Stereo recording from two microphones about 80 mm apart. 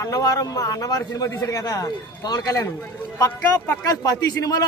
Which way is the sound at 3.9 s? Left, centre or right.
Left.